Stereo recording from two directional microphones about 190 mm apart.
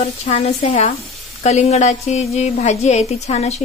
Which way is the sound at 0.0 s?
30° left (ahead or behind).